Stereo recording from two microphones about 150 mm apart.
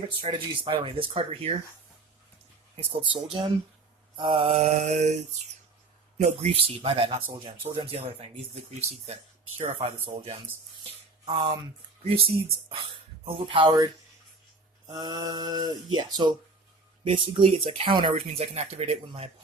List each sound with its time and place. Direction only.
0.2 s speech: 30° right (ahead or behind)
2.7 s speech: 35° right (ahead or behind)
14.9 s speech: 25° right (ahead or behind); by 19.3 s 45° right (ahead or behind)